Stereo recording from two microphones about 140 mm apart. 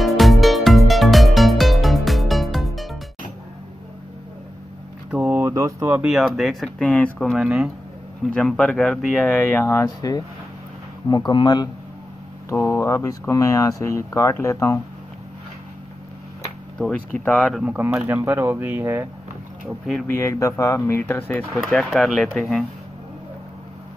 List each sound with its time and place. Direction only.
0.0 s music: centre (ahead or behind)
5.1 s a sound: 10° right (ahead or behind)
5.5 s speech: 20° right (ahead or behind)
6.1 s speech: centre (ahead or behind)
9.4 s speech: 15° left (ahead or behind); by 11.7 s 30° left (ahead or behind)
12.4 s speech: 20° left (ahead or behind)
16.7 s speech: 5° left (ahead or behind)
17.6 s speech: 10° right (ahead or behind)
20.1 s speech: 20° left (ahead or behind)
21.5 s speech: 5° left (ahead or behind)